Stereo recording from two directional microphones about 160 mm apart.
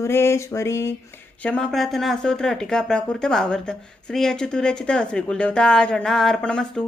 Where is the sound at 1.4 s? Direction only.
5° left (ahead or behind).